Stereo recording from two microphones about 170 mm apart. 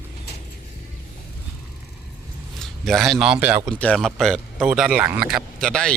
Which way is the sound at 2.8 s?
Centre (ahead or behind).